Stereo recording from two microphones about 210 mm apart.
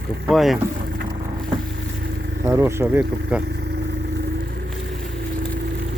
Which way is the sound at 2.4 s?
15° right (ahead or behind).